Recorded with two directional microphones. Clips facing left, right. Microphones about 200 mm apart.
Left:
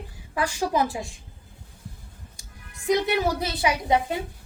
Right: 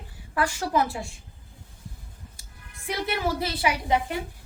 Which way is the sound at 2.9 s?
20° left (ahead or behind).